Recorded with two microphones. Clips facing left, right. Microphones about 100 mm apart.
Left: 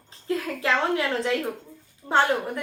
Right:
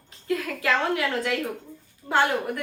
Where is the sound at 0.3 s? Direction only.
25° left (ahead or behind).